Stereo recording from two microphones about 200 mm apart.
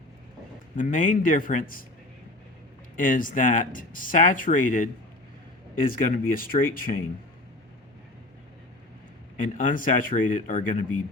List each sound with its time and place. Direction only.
0.8 s speech: 40° left (ahead or behind)
2.9 s speech: 40° left (ahead or behind)
9.4 s speech: 40° left (ahead or behind)